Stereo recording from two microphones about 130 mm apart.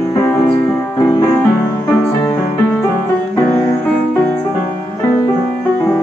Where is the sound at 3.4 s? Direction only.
20° left (ahead or behind).